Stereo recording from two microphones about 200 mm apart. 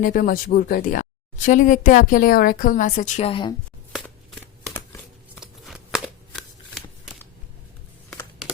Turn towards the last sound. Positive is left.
turn(degrees=0)  # may be behind; listen again after turning